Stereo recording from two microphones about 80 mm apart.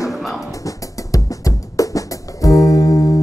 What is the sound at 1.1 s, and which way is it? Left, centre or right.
Music, left.